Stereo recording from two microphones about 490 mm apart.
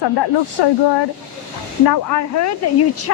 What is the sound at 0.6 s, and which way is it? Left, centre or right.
Speech, left.